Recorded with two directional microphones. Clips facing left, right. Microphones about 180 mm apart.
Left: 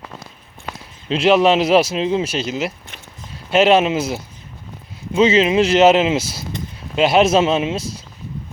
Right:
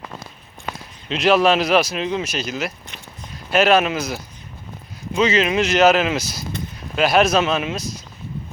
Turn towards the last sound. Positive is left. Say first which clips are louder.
# left 4 dB
turn(degrees=30)  # may be behind; listen again after turning